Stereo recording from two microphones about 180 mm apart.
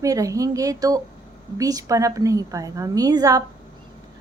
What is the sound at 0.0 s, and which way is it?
A woman's voice, 20° right (ahead or behind).